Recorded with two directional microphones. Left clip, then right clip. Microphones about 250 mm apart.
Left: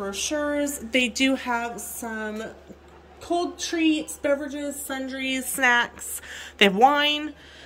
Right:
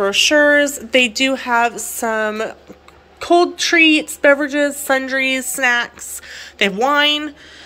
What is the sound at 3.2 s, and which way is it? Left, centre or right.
A woman's voice, right.